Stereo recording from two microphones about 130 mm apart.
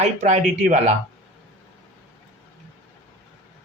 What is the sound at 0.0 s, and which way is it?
Speech, 60° right (ahead or behind).